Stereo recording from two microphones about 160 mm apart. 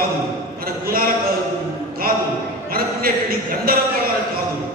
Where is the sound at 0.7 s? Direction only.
65° right (ahead or behind).